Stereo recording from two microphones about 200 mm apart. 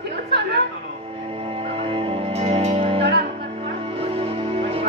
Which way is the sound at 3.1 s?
50° right (ahead or behind).